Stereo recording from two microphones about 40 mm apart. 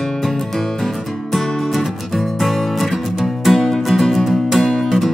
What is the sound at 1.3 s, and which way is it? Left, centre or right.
Music, centre.